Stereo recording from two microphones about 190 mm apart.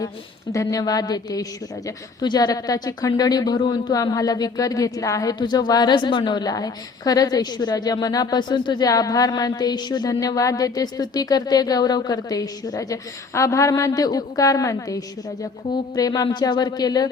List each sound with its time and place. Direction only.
0.5 s speech: 15° left (ahead or behind)